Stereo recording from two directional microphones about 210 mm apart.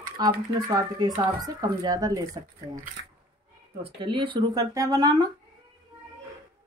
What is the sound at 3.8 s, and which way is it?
Speech, 25° right (ahead or behind).